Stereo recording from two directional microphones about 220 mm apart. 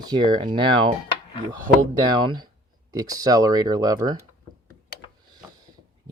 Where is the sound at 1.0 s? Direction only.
25° left (ahead or behind).